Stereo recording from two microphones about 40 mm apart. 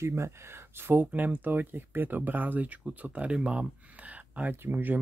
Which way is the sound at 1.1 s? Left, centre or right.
Right.